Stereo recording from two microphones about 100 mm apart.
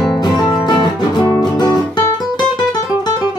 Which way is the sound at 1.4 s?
40° left (ahead or behind).